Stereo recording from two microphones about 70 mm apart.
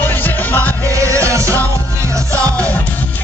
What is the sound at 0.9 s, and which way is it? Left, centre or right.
Music, right.